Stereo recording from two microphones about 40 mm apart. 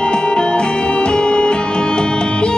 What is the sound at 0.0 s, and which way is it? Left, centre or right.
Music, left.